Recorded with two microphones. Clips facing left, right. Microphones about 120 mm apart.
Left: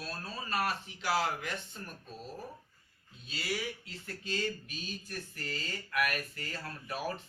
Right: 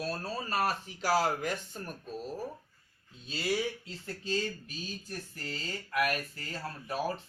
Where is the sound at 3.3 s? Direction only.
30° right (ahead or behind).